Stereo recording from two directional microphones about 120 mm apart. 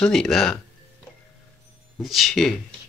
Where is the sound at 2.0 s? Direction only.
Centre (ahead or behind).